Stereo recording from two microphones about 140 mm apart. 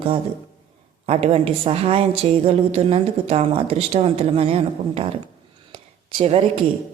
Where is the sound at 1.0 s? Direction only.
45° right (ahead or behind).